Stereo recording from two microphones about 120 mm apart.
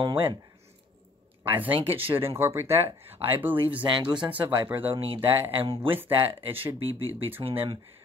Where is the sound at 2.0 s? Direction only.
15° right (ahead or behind).